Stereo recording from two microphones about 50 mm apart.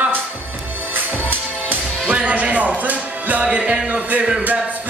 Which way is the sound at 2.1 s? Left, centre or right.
Right.